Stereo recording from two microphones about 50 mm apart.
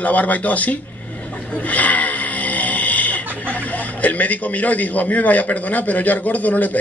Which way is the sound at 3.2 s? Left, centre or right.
Right.